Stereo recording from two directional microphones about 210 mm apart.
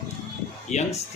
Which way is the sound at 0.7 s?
35° left (ahead or behind).